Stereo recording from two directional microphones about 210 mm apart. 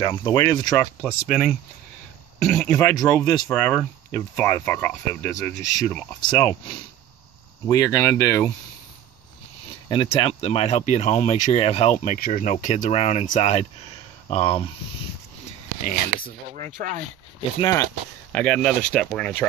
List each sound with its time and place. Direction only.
0.0 s speech: 20° left (ahead or behind)
1.0 s speech: centre (ahead or behind); by 6.5 s 20° left (ahead or behind)
7.6 s speech: 15° left (ahead or behind)
9.8 s speech: 25° left (ahead or behind)
16.5 s speech: 35° right (ahead or behind)
17.6 s speech: 20° left (ahead or behind)
18.3 s speech: 5° left (ahead or behind)